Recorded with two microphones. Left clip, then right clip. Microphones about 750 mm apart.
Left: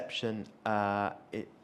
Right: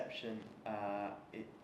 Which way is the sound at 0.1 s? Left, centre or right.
Left.